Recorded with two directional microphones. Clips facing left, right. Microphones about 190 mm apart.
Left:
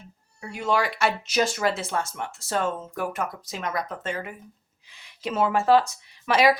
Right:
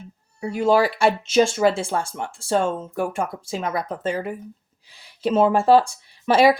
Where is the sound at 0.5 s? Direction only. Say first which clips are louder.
Right 7 dB; 35° right (ahead or behind).